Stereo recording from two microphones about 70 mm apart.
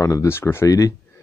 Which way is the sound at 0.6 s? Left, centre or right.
Left.